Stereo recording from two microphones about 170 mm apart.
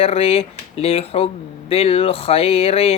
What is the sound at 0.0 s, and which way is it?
Speech, 35° left (ahead or behind).